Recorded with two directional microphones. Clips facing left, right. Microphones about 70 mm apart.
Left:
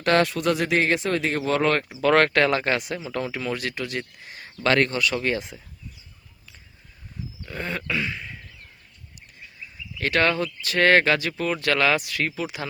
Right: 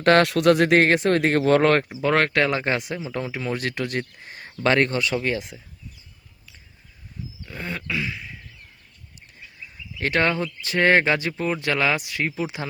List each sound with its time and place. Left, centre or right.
0.0 s speech: right
0.3 s speech: right
2.0 s speech: centre
3.6 s speech: right
4.9 s speech: right
5.1 s speech: centre
7.4 s a sound: centre
10.0 s speech: right